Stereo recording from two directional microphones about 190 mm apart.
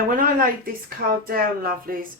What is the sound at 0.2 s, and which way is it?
A woman's voice, 50° right (ahead or behind).